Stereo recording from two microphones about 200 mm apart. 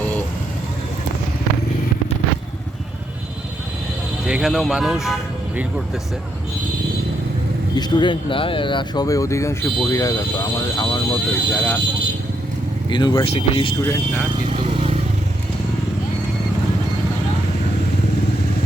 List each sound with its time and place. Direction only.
4.3 s speech: centre (ahead or behind)
7.8 s speech: 20° left (ahead or behind)
12.9 s speech: 20° left (ahead or behind)